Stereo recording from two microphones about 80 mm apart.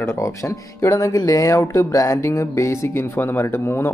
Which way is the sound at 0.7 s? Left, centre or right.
Left.